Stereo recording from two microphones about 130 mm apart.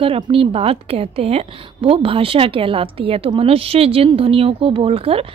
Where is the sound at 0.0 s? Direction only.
45° right (ahead or behind).